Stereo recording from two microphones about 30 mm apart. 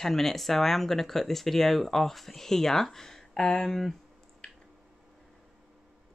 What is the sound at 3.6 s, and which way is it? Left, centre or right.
Speech, centre.